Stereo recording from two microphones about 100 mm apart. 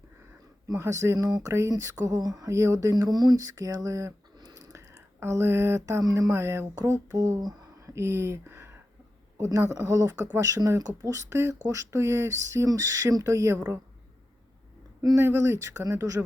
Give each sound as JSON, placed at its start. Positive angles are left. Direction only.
{"t": 0.7, "sound": "speech", "side_deg": -30}
{"t": 6.0, "sound": "speech", "side_deg": -35}
{"t": 7.2, "sound": "a sound", "side_deg": -35}
{"t": 7.9, "sound": "speech", "side_deg": -25}
{"t": 15.2, "sound": "speech", "side_deg": -25}